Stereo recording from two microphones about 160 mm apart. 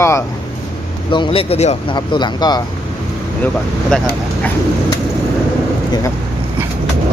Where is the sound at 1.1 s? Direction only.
30° left (ahead or behind).